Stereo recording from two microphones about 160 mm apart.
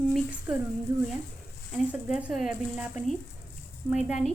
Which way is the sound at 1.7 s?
5° right (ahead or behind).